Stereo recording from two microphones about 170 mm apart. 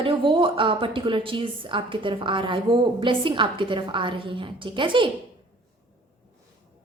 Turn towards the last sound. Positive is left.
turn(degrees=-30)  # may be behind; listen again after turning